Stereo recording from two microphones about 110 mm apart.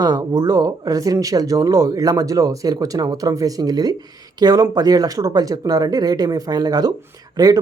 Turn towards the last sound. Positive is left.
turn(degrees=-35)  # may be behind; listen again after turning